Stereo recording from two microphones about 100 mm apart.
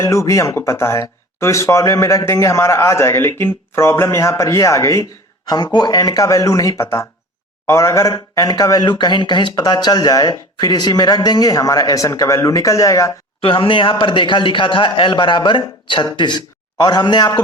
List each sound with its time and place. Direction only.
0.0 s a man's voice: 30° left (ahead or behind)
5.5 s speech: 45° left (ahead or behind)
13.4 s a man's voice: 65° left (ahead or behind); by 17.4 s 45° left (ahead or behind)